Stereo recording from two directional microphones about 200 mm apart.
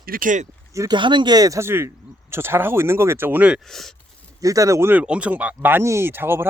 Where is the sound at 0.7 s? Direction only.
15° right (ahead or behind); by 3.9 s centre (ahead or behind).